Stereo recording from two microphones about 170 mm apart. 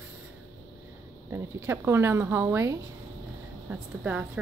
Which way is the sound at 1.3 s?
15° right (ahead or behind).